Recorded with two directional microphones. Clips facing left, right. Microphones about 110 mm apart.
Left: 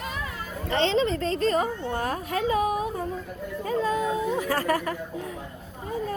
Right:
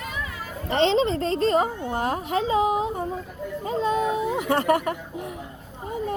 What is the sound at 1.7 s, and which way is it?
Speech, 15° right (ahead or behind).